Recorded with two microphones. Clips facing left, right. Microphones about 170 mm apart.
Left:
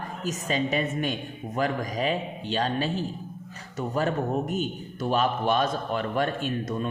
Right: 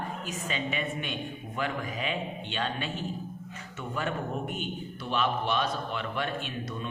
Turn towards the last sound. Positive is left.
turn(degrees=45)  # may be behind; listen again after turning